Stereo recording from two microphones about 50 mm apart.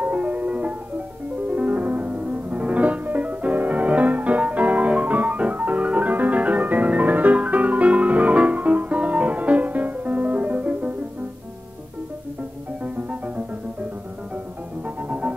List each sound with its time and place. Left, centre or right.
0.0 s music: right
12.8 s music: right
15.0 s music: right